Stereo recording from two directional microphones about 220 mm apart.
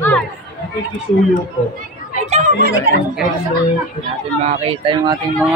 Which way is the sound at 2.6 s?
45° right (ahead or behind).